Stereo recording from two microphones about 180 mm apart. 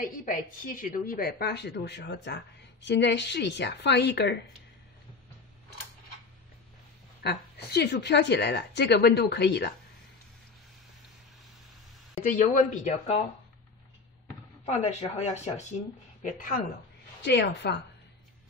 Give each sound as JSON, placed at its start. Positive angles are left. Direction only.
{"t": 0.0, "sound": "a woman's voice", "side_deg": 50}
{"t": 7.2, "sound": "a woman's voice", "side_deg": 65}
{"t": 12.2, "sound": "a woman's voice", "side_deg": 45}
{"t": 14.6, "sound": "a woman's voice", "side_deg": 35}
{"t": 17.2, "sound": "a woman's voice", "side_deg": 80}